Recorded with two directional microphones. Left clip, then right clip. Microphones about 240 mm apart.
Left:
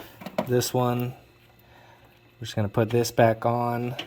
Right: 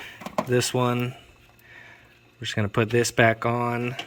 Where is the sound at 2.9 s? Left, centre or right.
Centre.